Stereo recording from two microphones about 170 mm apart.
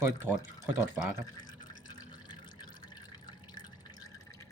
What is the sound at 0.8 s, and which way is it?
Speech, 10° right (ahead or behind).